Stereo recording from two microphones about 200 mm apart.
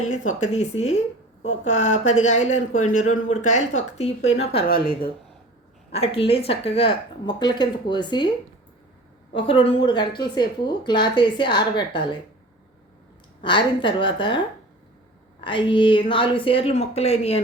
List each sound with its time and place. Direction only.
0.1 s speech: 35° left (ahead or behind)
5.9 s speech: 30° left (ahead or behind)
9.3 s speech: 25° left (ahead or behind)
13.4 s speech: 25° left (ahead or behind)